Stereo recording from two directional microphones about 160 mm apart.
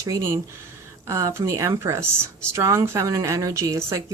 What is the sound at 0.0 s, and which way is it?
Speech, 20° right (ahead or behind).